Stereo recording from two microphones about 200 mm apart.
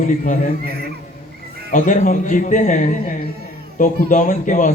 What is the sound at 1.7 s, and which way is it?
Speech, 40° left (ahead or behind).